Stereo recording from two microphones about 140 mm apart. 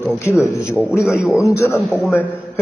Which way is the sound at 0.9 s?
5° right (ahead or behind).